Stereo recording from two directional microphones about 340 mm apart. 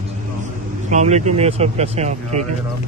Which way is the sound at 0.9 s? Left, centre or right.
Centre.